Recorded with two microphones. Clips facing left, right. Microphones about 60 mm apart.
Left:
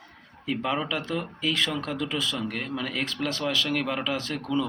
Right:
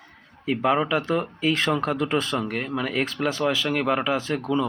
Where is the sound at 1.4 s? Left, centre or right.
Right.